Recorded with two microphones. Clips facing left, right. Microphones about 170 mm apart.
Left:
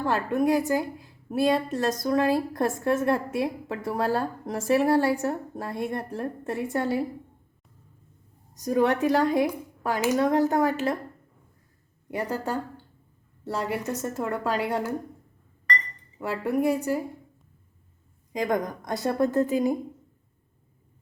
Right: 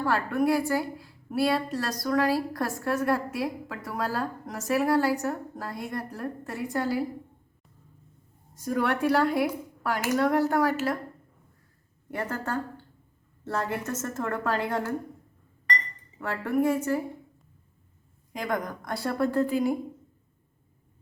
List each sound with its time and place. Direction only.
0.0 s a woman's voice: 20° left (ahead or behind)
8.6 s a woman's voice: 20° left (ahead or behind)
12.1 s a woman's voice: 15° left (ahead or behind)
16.2 s a woman's voice: 15° left (ahead or behind)
18.3 s a woman's voice: 20° left (ahead or behind)